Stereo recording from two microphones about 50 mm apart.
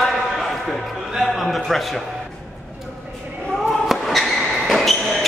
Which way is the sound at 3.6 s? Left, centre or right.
Centre.